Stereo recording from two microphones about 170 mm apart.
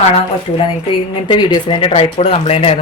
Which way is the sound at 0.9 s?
30° left (ahead or behind).